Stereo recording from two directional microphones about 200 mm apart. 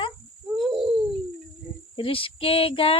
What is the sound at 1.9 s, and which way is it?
Child singing, 25° left (ahead or behind).